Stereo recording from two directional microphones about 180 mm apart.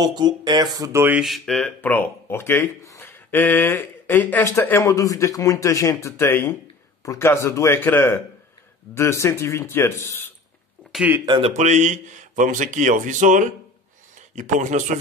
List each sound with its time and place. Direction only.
0.0 s speech: 25° right (ahead or behind); by 10.3 s 15° left (ahead or behind)
10.9 s a sound: 5° right (ahead or behind)
11.1 s speech: 25° right (ahead or behind)
11.5 s speech: 40° right (ahead or behind)